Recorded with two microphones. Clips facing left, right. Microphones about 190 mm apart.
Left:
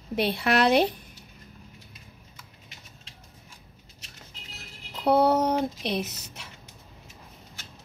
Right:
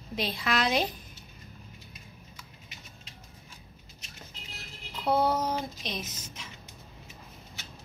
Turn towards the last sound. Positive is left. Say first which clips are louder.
# left 7 dB
turn(degrees=65)  # may be behind; listen again after turning